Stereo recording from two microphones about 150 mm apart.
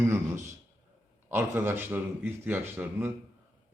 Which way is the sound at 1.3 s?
15° right (ahead or behind).